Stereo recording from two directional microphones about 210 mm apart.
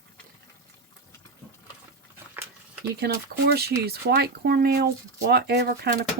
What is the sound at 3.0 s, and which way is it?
Speech, 50° right (ahead or behind).